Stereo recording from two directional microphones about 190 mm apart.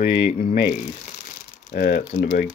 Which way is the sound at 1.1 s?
45° left (ahead or behind).